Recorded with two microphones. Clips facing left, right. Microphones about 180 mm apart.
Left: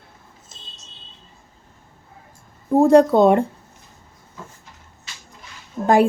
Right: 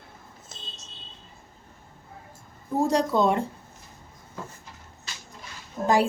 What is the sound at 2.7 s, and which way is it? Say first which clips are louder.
Speech: left 10 dB; 55° left (ahead or behind).